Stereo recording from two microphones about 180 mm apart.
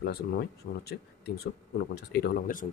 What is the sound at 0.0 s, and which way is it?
Speech, 60° left (ahead or behind).